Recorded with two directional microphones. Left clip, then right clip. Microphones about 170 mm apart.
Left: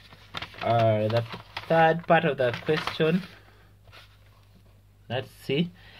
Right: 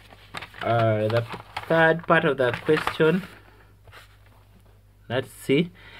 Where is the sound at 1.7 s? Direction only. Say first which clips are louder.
Right 1 dB; 20° right (ahead or behind).